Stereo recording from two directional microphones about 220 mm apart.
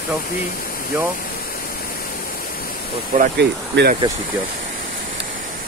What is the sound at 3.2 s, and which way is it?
Speech, 50° right (ahead or behind).